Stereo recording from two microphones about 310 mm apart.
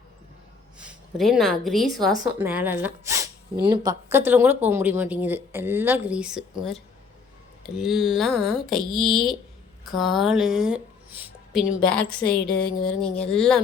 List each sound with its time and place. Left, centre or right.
0.8 s a woman's voice: centre